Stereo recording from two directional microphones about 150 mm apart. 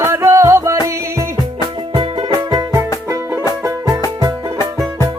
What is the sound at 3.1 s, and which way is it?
Music, 15° right (ahead or behind).